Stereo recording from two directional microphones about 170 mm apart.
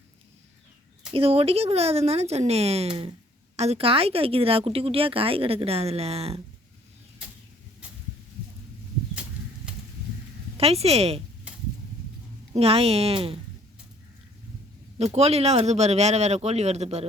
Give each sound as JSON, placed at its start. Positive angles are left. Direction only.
{"t": 1.1, "sound": "speech", "side_deg": -35}
{"t": 10.6, "sound": "speech", "side_deg": -35}
{"t": 12.5, "sound": "speech", "side_deg": -35}
{"t": 14.9, "sound": "speech", "side_deg": -40}